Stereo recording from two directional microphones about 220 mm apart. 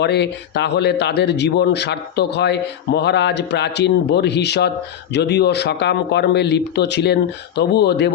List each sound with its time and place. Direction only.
0.0 s speech: 50° left (ahead or behind)